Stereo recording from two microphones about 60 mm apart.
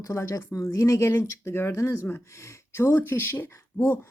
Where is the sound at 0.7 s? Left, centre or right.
Left.